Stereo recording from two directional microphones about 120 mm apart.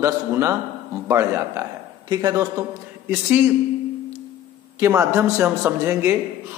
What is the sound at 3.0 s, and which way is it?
Speech, 15° right (ahead or behind).